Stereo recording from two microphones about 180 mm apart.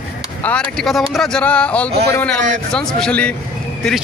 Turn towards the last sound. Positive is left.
turn(degrees=5)  # may be behind; listen again after turning